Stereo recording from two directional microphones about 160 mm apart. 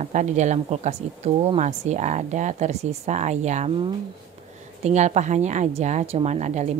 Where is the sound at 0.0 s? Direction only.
50° right (ahead or behind).